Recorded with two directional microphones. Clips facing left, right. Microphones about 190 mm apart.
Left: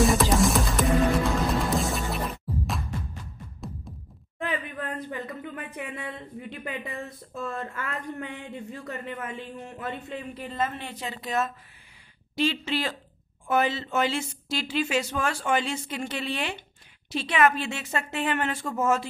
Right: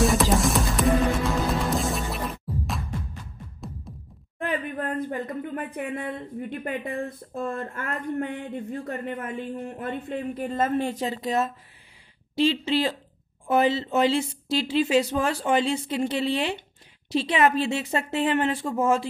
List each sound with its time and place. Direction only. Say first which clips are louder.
0.0 s music: even; centre (ahead or behind)
3.9 s music: right 1 dB; centre (ahead or behind)
4.4 s a sound: right 3 dB; 50° right (ahead or behind)
5.9 s speech: right 6 dB; 55° right (ahead or behind); by 19.0 s 30° right (ahead or behind)